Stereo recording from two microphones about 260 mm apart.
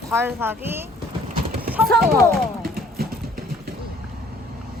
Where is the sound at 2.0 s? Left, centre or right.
Right.